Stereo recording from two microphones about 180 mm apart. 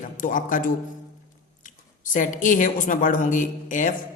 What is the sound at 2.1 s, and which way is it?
A man's voice, 45° left (ahead or behind).